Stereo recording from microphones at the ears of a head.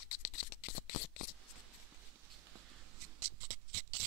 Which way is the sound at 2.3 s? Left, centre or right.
Right.